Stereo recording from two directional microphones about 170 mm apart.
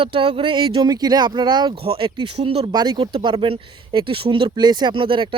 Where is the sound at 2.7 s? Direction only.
25° right (ahead or behind).